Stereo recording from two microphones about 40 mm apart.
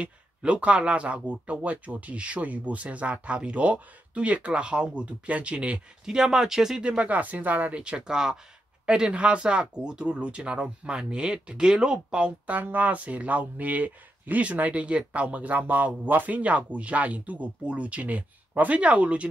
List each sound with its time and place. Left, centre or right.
0.0 s speech: right
6.0 s speech: centre
6.8 s speech: right
7.7 s speech: right
8.1 s speech: centre
12.4 s speech: right
12.8 s speech: right